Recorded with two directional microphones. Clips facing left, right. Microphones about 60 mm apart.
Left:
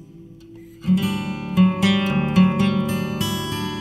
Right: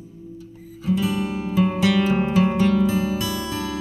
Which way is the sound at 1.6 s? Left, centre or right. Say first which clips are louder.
Left 1 dB; left.